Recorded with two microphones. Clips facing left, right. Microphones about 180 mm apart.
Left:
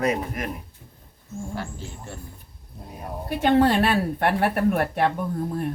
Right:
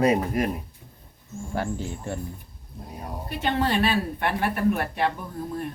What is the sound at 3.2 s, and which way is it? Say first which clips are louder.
A woman's voice: left 7 dB; 60° left (ahead or behind).